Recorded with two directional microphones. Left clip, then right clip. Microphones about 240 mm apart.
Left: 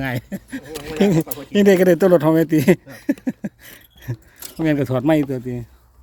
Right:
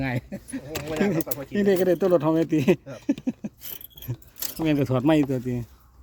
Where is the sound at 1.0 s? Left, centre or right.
Left.